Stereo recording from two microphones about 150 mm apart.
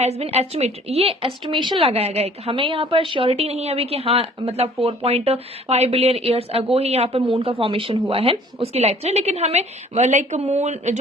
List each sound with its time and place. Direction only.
0.0 s a woman's voice: 45° right (ahead or behind)